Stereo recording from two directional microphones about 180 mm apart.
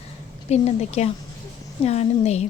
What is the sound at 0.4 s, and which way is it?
A woman's voice, 35° left (ahead or behind).